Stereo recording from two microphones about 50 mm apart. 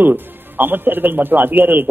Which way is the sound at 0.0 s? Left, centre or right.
Right.